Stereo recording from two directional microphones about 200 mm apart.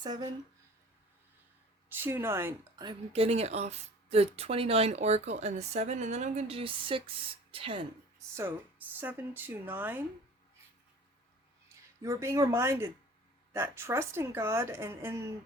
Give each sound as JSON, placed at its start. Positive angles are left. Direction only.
{"t": 0.0, "sound": "speech", "side_deg": -20}
{"t": 1.9, "sound": "a woman's voice", "side_deg": -10}
{"t": 3.1, "sound": "speech", "side_deg": -30}
{"t": 9.0, "sound": "a woman's voice", "side_deg": -10}
{"t": 12.0, "sound": "a woman's voice", "side_deg": -15}